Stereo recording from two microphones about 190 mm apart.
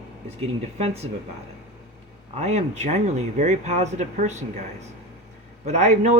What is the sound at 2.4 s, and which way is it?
A woman's voice, 35° right (ahead or behind).